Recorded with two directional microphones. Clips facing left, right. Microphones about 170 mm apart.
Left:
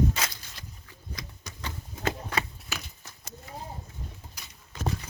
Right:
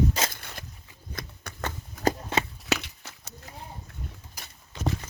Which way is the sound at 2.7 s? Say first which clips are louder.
Right 12 dB; 75° right (ahead or behind).